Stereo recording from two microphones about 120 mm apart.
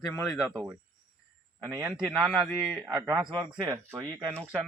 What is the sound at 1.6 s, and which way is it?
Speech, 20° right (ahead or behind).